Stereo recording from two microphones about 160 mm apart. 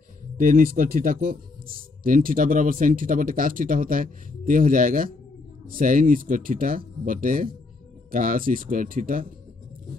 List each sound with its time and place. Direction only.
0.4 s speech: 60° right (ahead or behind)